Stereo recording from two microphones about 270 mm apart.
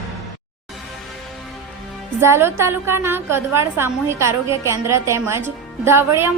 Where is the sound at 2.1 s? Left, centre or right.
Centre.